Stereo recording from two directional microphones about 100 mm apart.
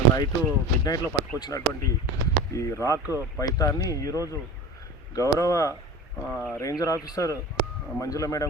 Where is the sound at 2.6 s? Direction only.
30° left (ahead or behind).